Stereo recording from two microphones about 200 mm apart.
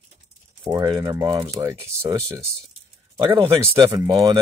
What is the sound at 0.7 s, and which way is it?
Speech, 20° right (ahead or behind).